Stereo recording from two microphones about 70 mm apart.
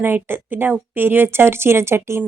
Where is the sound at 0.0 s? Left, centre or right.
Right.